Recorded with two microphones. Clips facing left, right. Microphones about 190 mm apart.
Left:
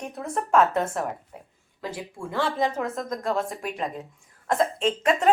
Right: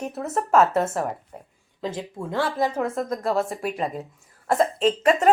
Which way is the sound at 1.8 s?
20° right (ahead or behind).